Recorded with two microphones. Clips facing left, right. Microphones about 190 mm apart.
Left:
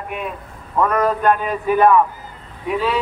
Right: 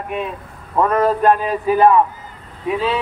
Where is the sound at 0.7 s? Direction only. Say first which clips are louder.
Right 2 dB; 30° right (ahead or behind).